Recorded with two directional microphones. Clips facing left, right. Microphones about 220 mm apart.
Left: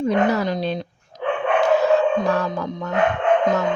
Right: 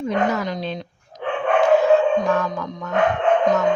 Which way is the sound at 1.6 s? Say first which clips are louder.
Right 2 dB; 35° left (ahead or behind).